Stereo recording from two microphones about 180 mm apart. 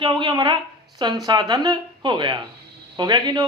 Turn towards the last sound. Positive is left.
turn(degrees=-25)  # may be behind; listen again after turning